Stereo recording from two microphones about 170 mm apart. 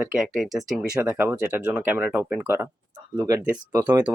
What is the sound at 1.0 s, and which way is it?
Speech, 10° right (ahead or behind).